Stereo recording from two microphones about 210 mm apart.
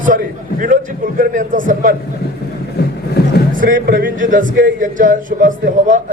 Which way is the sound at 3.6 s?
40° right (ahead or behind).